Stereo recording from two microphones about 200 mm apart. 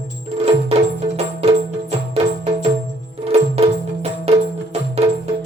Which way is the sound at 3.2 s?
30° right (ahead or behind).